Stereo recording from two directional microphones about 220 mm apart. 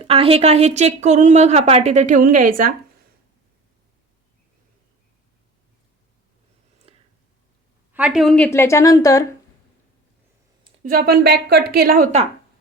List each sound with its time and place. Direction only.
0.0 s a woman's voice: 25° right (ahead or behind)
6.9 s a sound: 25° right (ahead or behind)
7.9 s a woman's voice: 5° right (ahead or behind); by 9.2 s 15° left (ahead or behind)
10.8 s a woman's voice: 45° right (ahead or behind)